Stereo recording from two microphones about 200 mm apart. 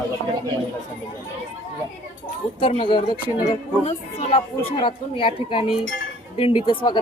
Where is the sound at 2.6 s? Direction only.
25° left (ahead or behind).